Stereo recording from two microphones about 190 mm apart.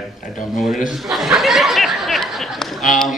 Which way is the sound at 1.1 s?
Centre (ahead or behind).